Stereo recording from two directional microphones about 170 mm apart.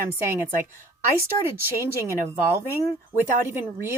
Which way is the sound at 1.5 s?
15° right (ahead or behind).